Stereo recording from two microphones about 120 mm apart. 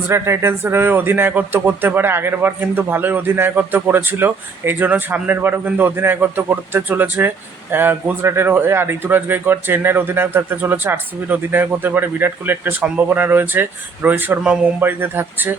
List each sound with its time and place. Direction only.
0.1 s speech: 20° right (ahead or behind)